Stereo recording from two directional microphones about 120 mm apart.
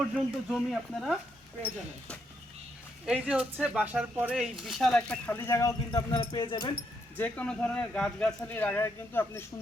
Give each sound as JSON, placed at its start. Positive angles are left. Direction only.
{"t": 0.1, "sound": "speech", "side_deg": 0}
{"t": 3.1, "sound": "speech", "side_deg": -10}
{"t": 5.5, "sound": "speech", "side_deg": 30}
{"t": 7.2, "sound": "speech", "side_deg": 10}